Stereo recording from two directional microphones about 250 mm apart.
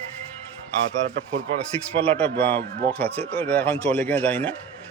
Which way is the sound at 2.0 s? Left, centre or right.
Centre.